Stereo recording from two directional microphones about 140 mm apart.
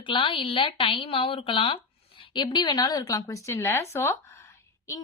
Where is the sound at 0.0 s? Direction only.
35° left (ahead or behind).